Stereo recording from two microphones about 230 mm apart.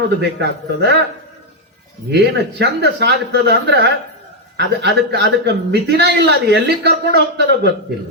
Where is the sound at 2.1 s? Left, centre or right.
Right.